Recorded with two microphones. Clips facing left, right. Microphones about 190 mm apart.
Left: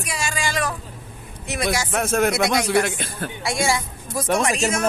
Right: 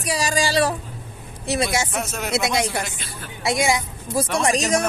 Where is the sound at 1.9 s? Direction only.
55° left (ahead or behind).